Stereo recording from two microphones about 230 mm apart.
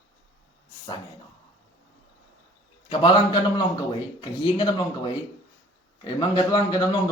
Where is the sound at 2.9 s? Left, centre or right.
Left.